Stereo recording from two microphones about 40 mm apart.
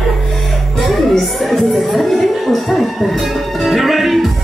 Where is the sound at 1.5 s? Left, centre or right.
Centre.